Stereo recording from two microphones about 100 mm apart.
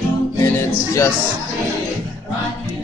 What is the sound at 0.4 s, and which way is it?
Music, 30° left (ahead or behind).